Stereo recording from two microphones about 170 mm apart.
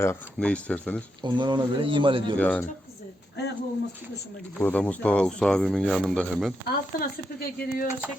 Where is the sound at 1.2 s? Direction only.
25° right (ahead or behind).